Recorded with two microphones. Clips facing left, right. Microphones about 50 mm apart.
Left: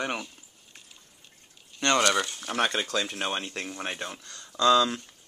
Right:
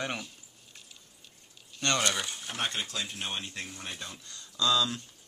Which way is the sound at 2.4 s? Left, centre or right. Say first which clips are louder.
Left 7 dB; left.